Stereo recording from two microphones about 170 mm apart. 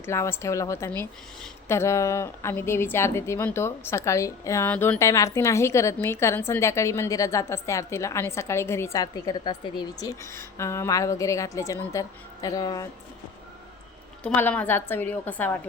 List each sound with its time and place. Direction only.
0.0 s speech: 15° left (ahead or behind)
14.3 s speech: 10° left (ahead or behind)